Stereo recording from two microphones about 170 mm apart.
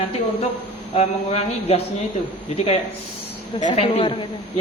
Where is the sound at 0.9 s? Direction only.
40° left (ahead or behind).